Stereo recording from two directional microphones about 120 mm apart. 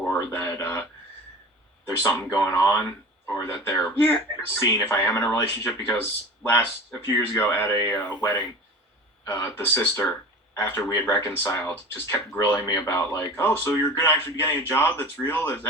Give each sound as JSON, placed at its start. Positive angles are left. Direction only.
{"t": 0.0, "sound": "speech", "side_deg": 20}
{"t": 2.0, "sound": "speech", "side_deg": 20}